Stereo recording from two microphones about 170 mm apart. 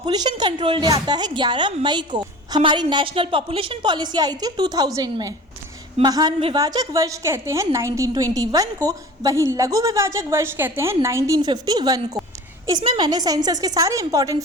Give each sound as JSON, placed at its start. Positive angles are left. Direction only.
{"t": 0.0, "sound": "a woman's voice", "side_deg": -25}